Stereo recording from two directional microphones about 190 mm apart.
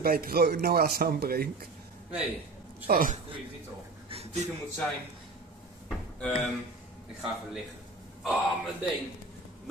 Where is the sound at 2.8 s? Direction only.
45° right (ahead or behind).